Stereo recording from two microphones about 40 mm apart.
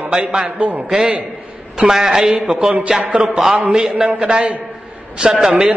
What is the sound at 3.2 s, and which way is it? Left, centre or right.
Speech, centre.